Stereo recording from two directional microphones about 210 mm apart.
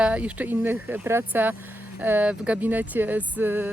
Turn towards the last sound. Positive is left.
turn(degrees=-10)  # may be behind; listen again after turning